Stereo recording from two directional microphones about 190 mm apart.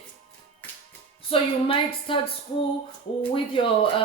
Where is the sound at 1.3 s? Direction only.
30° left (ahead or behind).